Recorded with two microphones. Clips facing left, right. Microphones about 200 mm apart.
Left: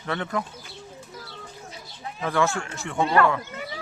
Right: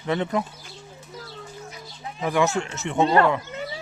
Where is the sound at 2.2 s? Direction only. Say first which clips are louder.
Right 2 dB; 15° right (ahead or behind).